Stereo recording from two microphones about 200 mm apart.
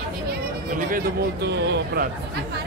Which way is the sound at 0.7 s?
45° right (ahead or behind).